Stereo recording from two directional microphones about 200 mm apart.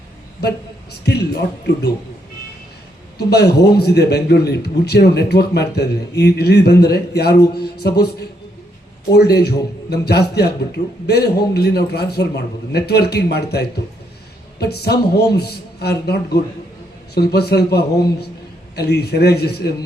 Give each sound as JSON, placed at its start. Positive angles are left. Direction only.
{"t": 1.0, "sound": "a man's voice", "side_deg": 55}
{"t": 3.2, "sound": "a man's voice", "side_deg": 55}
{"t": 9.1, "sound": "a man's voice", "side_deg": 55}